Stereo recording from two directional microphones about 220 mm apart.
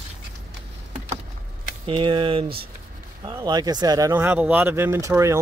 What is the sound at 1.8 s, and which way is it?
Speech, 25° right (ahead or behind).